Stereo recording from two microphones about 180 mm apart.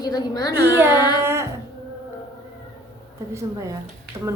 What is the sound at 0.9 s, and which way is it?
Child singing, 20° left (ahead or behind).